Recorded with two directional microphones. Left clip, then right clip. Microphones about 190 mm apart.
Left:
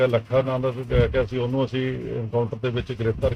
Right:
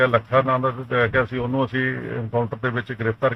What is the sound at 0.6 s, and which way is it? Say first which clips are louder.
Speech: right 2 dB; 25° left (ahead or behind).